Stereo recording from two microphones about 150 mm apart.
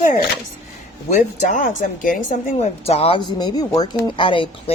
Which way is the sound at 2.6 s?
45° left (ahead or behind).